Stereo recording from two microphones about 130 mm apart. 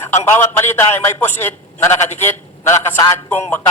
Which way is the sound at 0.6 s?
15° left (ahead or behind).